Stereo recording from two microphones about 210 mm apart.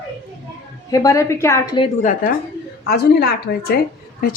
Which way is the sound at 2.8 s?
50° left (ahead or behind).